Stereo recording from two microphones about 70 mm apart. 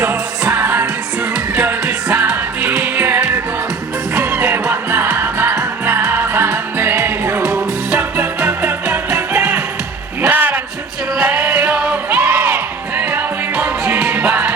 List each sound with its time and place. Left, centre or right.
0.0 s music: right
12.2 s music: right